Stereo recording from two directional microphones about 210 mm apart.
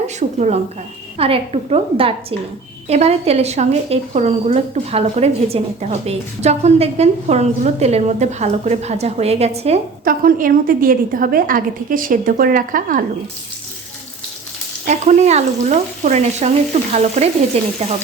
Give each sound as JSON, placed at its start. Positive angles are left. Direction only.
{"t": 0.2, "sound": "a woman's voice", "side_deg": -35}
{"t": 10.0, "sound": "a woman's voice", "side_deg": -45}
{"t": 14.8, "sound": "a woman's voice", "side_deg": -35}